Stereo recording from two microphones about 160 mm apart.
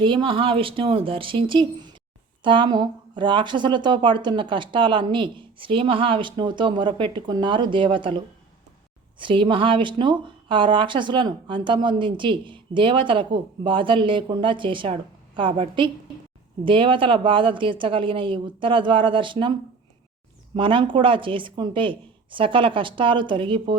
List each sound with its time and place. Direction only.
0.0 s speech: 30° right (ahead or behind)
20.6 s speech: 30° right (ahead or behind)